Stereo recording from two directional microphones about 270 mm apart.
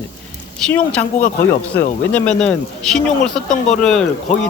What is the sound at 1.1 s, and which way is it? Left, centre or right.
Speech, left.